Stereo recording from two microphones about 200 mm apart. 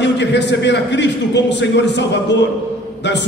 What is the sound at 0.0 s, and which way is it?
A man's voice, 60° left (ahead or behind).